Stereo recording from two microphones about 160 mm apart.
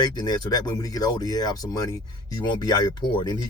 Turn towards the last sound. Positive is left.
turn(degrees=30)  # may be behind; listen again after turning